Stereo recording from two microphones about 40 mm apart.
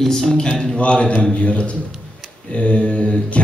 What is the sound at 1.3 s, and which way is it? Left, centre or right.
Speech, left.